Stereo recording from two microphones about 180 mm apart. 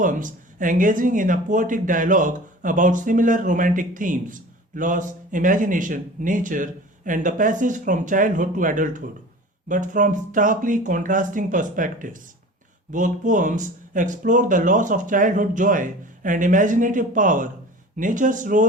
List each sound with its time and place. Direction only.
0.0 s speech: 45° right (ahead or behind)